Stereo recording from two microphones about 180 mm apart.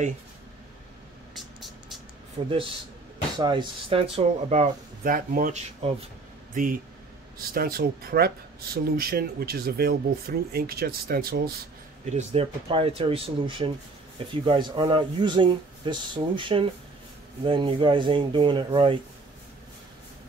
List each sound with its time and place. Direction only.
1.3 s music: centre (ahead or behind)
2.4 s speech: 35° right (ahead or behind)
5.8 s speech: 35° right (ahead or behind)
6.5 s speech: 50° right (ahead or behind)
12.1 s speech: 40° right (ahead or behind)